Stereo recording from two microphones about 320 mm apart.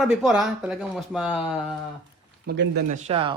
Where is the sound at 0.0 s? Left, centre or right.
Centre.